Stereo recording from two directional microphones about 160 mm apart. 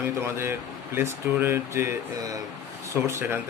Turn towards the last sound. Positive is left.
turn(degrees=-15)  # may be behind; listen again after turning